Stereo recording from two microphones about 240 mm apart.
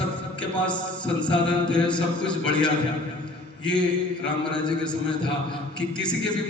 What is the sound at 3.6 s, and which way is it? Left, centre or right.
A man's voice, centre.